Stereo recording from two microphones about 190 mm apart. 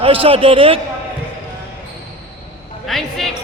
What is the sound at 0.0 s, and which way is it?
Speech, 30° right (ahead or behind).